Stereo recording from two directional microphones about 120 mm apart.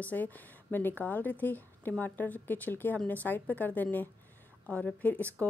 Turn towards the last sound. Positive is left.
turn(degrees=10)  # may be behind; listen again after turning